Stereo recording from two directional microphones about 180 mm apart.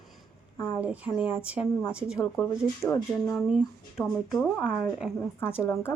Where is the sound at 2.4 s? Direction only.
15° left (ahead or behind).